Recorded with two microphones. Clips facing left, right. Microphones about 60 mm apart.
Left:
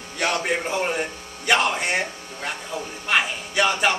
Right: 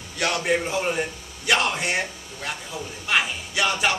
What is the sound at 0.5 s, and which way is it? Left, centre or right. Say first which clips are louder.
A man's voice: right 1 dB; centre.